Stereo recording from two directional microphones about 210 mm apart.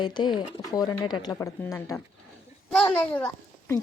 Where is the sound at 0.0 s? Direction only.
20° left (ahead or behind).